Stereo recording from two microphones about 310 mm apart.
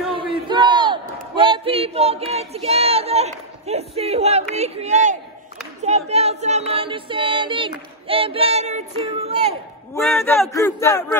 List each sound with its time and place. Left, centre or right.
0.1 s battle cry: centre
5.9 s a sound: right
9.0 s speech: centre
9.9 s speech: centre